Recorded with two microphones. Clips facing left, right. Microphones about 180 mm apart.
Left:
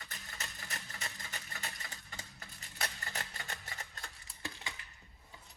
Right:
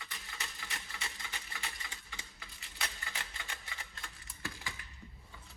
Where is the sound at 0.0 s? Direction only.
40° left (ahead or behind).